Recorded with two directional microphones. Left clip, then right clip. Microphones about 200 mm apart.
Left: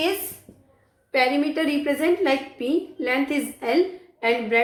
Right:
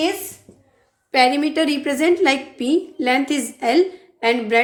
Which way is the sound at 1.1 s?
55° right (ahead or behind).